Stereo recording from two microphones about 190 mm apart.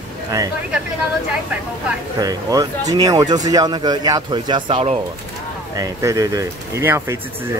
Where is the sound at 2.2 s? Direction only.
20° right (ahead or behind).